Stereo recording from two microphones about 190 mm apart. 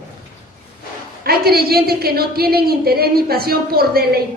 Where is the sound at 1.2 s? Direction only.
55° right (ahead or behind).